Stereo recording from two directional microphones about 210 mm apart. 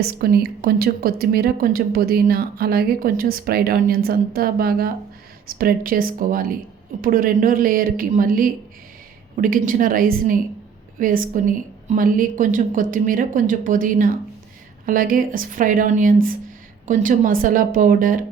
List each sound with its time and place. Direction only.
0.0 s a woman's voice: 50° right (ahead or behind)